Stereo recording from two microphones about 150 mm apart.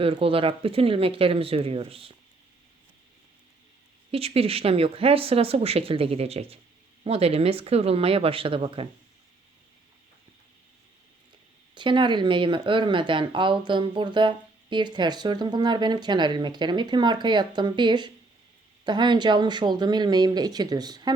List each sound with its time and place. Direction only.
0.0 s speech: 40° right (ahead or behind)
4.1 s speech: 40° right (ahead or behind)
11.7 s speech: 30° right (ahead or behind)